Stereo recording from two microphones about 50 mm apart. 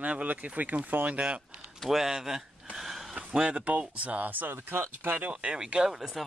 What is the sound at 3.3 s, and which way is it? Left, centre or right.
Speech, right.